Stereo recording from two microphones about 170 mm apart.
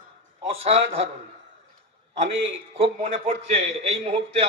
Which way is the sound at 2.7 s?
35° right (ahead or behind).